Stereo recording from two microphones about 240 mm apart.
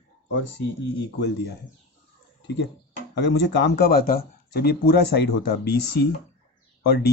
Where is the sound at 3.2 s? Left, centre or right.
Left.